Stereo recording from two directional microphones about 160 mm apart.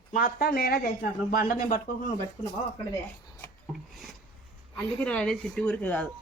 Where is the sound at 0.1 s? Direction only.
65° left (ahead or behind).